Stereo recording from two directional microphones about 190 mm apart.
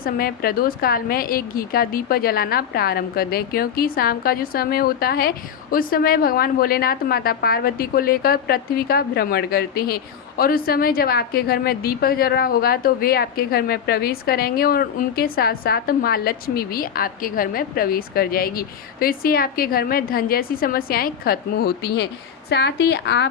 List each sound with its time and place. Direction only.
0.0 s a woman's voice: 50° left (ahead or behind)